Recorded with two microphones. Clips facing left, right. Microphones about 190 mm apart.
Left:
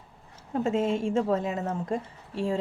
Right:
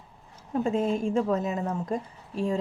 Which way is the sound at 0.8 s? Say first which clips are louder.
Left 1 dB; 30° left (ahead or behind).